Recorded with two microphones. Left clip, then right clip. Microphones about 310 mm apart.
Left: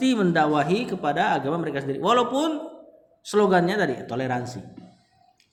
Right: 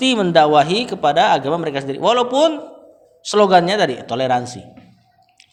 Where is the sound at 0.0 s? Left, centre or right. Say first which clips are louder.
Right 8 dB; centre.